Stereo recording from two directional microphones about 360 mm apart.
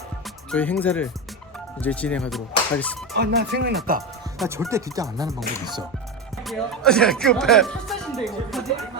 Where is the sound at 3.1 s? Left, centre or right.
Right.